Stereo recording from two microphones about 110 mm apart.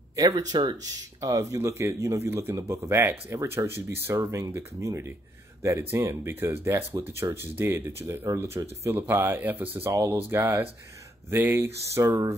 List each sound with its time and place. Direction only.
0.1 s speech: 35° right (ahead or behind)